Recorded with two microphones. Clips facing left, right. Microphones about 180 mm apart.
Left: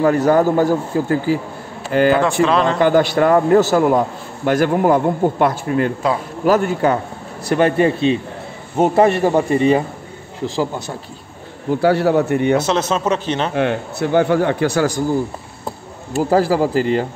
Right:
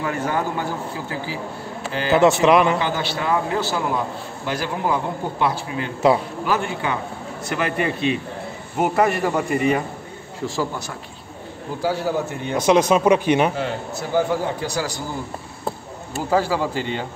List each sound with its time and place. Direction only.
0.0 s a man's voice: 40° left (ahead or behind)
2.1 s speech: 20° right (ahead or behind)
2.8 s a man's voice: 50° left (ahead or behind); by 9.8 s 30° left (ahead or behind)
10.4 s a man's voice: 20° left (ahead or behind)
11.8 s a man's voice: 65° left (ahead or behind)
12.5 s speech: 15° right (ahead or behind)
13.6 s a man's voice: 65° left (ahead or behind)
16.3 s a man's voice: 40° left (ahead or behind)